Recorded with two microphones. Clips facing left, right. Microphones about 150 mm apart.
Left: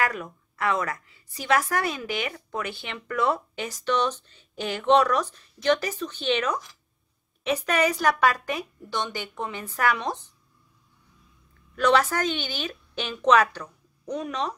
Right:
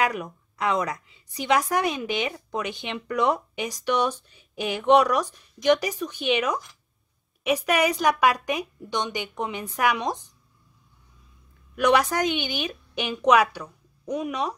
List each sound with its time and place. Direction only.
0.0 s a woman's voice: 20° right (ahead or behind)
11.7 s a woman's voice: 15° right (ahead or behind)